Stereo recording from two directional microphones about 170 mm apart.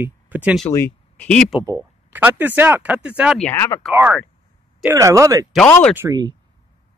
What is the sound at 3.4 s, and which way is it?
Speech, 15° left (ahead or behind).